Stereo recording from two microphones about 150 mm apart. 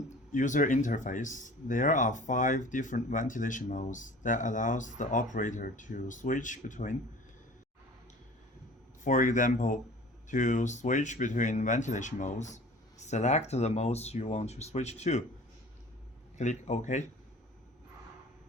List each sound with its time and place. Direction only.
0.3 s speech: 60° left (ahead or behind)
9.0 s speech: 60° left (ahead or behind)
16.4 s speech: 50° left (ahead or behind)